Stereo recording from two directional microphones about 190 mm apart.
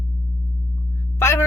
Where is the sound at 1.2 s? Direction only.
15° left (ahead or behind).